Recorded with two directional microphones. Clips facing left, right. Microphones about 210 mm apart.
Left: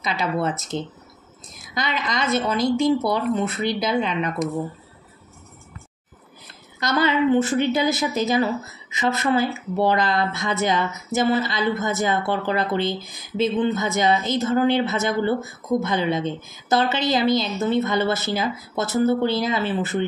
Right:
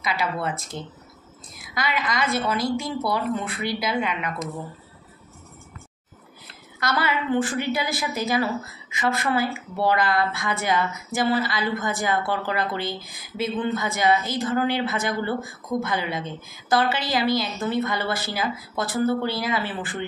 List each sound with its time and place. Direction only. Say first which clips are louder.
0.0 s speech: left 3 dB; 25° left (ahead or behind)
6.8 s speech: left 6 dB; 20° left (ahead or behind)